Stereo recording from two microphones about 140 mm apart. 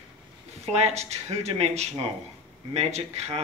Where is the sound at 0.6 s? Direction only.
50° right (ahead or behind).